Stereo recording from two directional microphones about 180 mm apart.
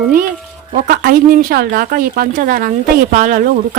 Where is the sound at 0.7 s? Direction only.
50° right (ahead or behind).